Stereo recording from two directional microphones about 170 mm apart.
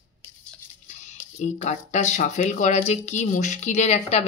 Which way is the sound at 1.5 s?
45° left (ahead or behind).